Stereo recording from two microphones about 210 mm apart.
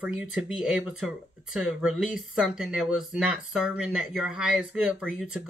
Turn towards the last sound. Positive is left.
turn(degrees=-5)  # may be behind; listen again after turning